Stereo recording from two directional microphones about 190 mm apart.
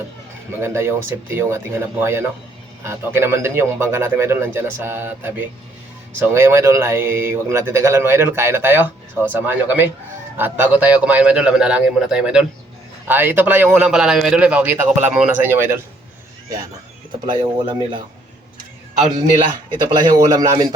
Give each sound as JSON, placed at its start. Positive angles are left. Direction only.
{"t": 0.6, "sound": "a man's voice", "side_deg": -15}
{"t": 17.2, "sound": "a man's voice", "side_deg": -20}
{"t": 19.1, "sound": "a man's voice", "side_deg": -20}